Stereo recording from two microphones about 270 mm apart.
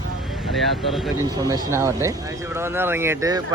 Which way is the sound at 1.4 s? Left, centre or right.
Centre.